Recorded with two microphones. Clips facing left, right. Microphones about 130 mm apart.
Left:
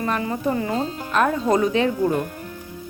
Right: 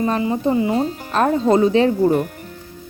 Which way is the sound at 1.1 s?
30° right (ahead or behind).